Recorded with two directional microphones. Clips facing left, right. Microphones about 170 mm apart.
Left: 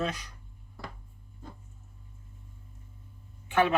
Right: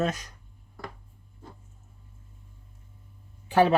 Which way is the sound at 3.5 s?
35° right (ahead or behind).